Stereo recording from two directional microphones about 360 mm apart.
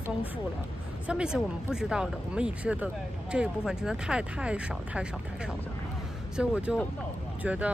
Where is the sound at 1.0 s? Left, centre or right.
Centre.